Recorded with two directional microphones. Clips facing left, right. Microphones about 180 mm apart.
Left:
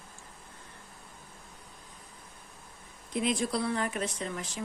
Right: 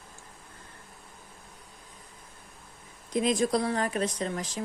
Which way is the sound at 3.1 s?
40° right (ahead or behind).